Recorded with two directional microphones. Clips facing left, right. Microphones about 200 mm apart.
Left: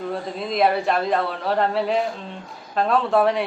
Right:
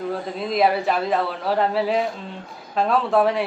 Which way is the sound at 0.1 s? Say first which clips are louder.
Right 1 dB; centre (ahead or behind).